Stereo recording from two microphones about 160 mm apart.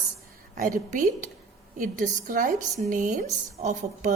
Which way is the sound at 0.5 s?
55° right (ahead or behind).